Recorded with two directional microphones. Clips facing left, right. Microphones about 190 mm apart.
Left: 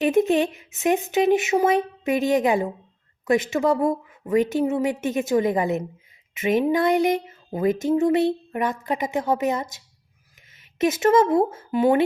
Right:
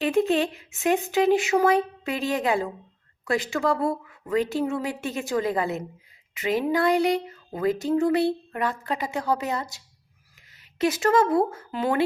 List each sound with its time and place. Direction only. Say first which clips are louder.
0.0 s speech: left 3 dB; 20° left (ahead or behind)